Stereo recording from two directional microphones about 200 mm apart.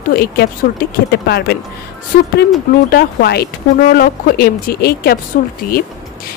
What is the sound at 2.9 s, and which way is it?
Speech, 50° left (ahead or behind).